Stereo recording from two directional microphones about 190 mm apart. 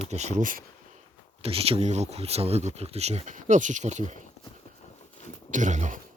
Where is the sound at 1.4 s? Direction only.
30° right (ahead or behind).